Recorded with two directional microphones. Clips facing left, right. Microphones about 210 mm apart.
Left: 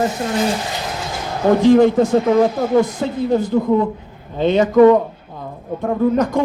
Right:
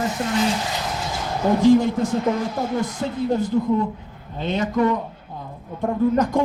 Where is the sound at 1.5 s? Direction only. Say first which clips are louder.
Left 4 dB; 65° left (ahead or behind); by 3.8 s 90° left.